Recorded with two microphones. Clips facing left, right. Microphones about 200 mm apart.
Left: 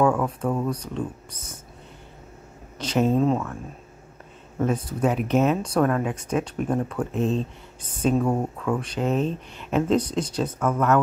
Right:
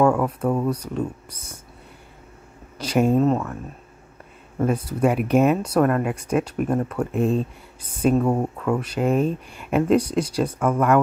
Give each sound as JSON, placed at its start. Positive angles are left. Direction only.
{"t": 0.0, "sound": "speech", "side_deg": -5}
{"t": 2.8, "sound": "speech", "side_deg": -10}
{"t": 4.6, "sound": "speech", "side_deg": -10}